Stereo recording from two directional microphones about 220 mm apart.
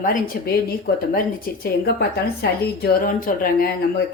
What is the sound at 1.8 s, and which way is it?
Speech, 45° left (ahead or behind).